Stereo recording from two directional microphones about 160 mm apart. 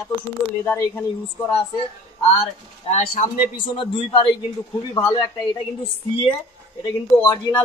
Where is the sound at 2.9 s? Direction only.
50° left (ahead or behind).